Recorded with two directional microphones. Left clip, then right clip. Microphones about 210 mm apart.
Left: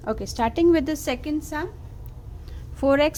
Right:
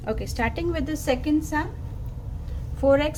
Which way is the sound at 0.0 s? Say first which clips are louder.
Left 2 dB; 20° left (ahead or behind).